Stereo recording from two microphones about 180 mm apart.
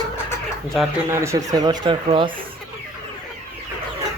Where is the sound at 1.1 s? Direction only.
15° right (ahead or behind).